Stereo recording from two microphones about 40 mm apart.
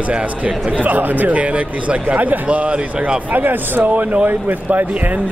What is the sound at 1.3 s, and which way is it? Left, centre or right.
A man's voice, right.